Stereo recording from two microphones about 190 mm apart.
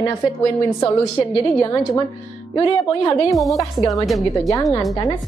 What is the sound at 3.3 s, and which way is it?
Speech, centre (ahead or behind).